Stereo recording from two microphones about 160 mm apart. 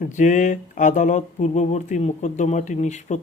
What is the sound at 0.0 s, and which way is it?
Speech, 50° left (ahead or behind).